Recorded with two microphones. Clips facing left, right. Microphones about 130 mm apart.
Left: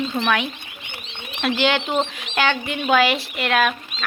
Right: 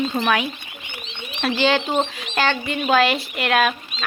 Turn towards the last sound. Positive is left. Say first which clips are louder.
# right 1 dB
turn(degrees=0)  # may be behind; listen again after turning